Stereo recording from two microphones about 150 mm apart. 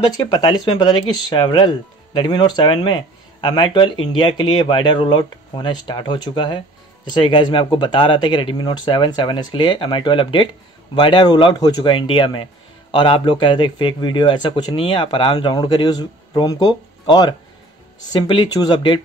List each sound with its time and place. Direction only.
0.3 s a man's voice: 30° left (ahead or behind)